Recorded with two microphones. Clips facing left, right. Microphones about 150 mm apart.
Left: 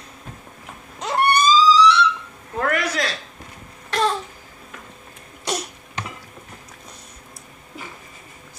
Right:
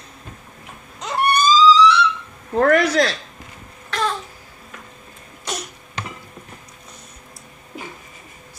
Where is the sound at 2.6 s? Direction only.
40° right (ahead or behind).